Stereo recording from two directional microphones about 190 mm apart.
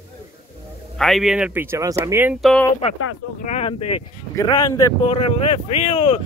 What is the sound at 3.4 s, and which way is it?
Speech, 30° left (ahead or behind).